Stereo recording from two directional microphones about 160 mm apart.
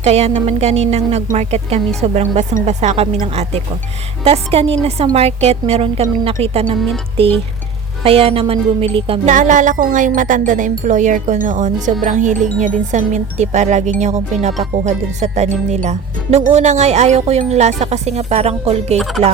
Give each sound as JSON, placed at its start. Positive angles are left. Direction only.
{"t": 0.0, "sound": "speech", "side_deg": -40}
{"t": 8.0, "sound": "speech", "side_deg": -35}
{"t": 9.3, "sound": "speech", "side_deg": -50}
{"t": 18.9, "sound": "speech", "side_deg": 0}